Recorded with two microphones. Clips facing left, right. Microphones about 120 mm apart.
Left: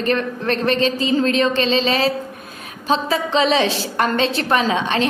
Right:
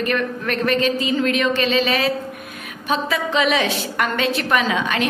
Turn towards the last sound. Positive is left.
turn(degrees=30)  # may be behind; listen again after turning